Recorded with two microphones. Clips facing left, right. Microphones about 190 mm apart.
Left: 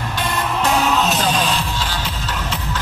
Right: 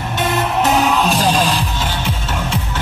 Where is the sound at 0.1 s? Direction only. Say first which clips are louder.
Right 5 dB; 20° right (ahead or behind).